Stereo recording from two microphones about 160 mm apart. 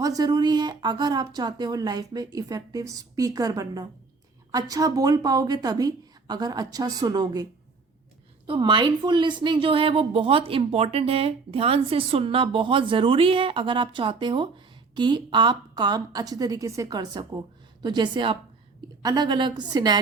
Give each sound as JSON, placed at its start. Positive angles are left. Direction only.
{"t": 0.0, "sound": "speech", "side_deg": -25}
{"t": 8.4, "sound": "speech", "side_deg": -30}